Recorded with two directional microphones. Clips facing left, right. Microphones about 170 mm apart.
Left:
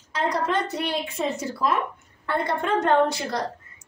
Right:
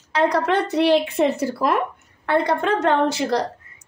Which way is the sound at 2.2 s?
75° right (ahead or behind).